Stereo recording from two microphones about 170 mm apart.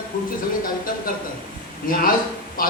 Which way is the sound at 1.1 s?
55° left (ahead or behind).